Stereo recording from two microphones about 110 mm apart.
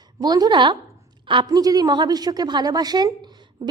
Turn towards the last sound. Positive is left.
turn(degrees=-35)  # may be behind; listen again after turning